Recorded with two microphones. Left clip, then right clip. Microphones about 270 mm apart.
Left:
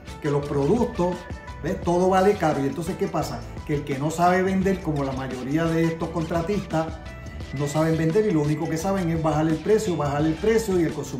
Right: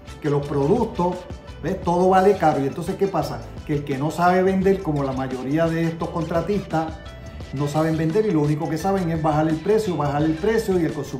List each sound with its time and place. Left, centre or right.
0.2 s speech: centre